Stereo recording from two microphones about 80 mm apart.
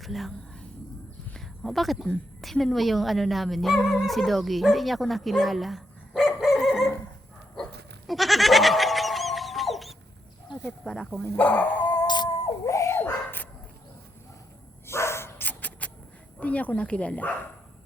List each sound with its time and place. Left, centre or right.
0.0 s speech: centre
1.3 s a sound: centre
2.4 s speech: centre
7.5 s goat: centre
10.8 s speech: centre
11.3 s speech: centre
11.9 s a sound: left
12.6 s dog: left
14.8 s bow-wow: left
16.4 s speech: centre